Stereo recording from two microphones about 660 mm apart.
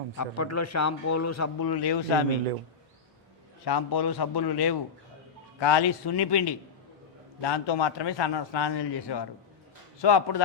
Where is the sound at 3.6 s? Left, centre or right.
Left.